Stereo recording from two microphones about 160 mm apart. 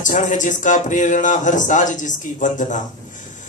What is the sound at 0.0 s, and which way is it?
Speech, 50° left (ahead or behind).